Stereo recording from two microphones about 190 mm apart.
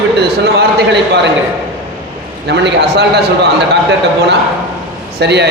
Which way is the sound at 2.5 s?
65° right (ahead or behind).